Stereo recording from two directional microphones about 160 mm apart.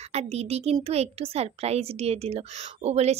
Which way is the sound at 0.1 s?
40° right (ahead or behind).